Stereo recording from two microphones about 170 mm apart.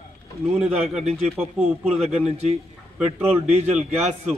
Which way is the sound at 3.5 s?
40° right (ahead or behind).